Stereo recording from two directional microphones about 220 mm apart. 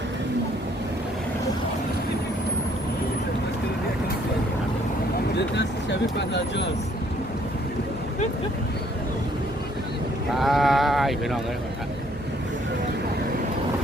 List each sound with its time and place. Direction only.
5.5 s vehicle: 50° left (ahead or behind)
10.3 s speech: centre (ahead or behind)